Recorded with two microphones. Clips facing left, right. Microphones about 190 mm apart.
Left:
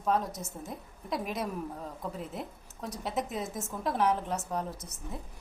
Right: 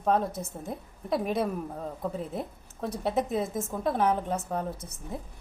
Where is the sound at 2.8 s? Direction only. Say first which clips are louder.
Right 6 dB; 60° right (ahead or behind).